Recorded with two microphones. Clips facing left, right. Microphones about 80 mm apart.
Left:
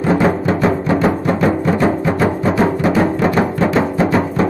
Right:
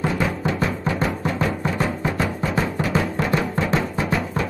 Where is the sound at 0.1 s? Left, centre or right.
Left.